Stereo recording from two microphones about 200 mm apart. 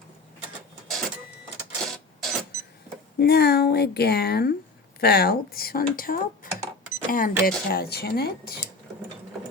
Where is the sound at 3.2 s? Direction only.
55° left (ahead or behind).